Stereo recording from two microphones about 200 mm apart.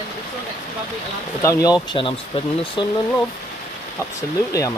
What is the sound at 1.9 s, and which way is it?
Speech, 25° left (ahead or behind).